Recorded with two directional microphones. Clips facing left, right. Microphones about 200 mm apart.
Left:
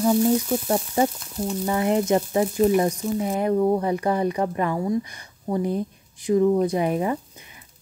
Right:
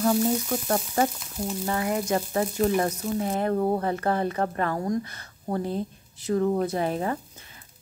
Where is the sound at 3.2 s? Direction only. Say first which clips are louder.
Left 3 dB; 10° left (ahead or behind).